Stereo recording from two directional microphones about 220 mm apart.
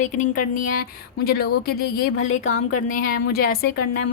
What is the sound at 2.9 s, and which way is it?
Speech, 40° left (ahead or behind).